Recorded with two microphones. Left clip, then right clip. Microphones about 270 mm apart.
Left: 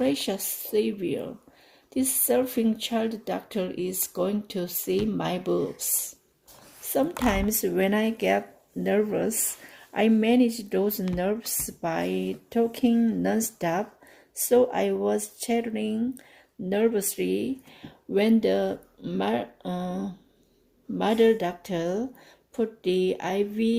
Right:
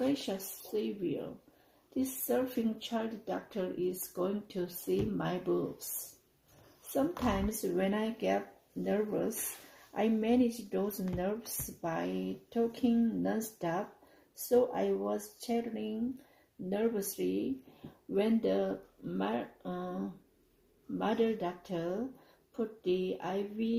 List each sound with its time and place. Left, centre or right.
0.0 s speech: left
6.9 s speech: left